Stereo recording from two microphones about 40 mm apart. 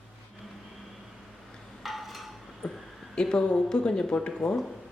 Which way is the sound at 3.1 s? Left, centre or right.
Centre.